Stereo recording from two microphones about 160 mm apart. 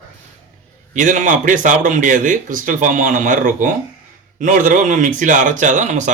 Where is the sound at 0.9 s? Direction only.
50° right (ahead or behind).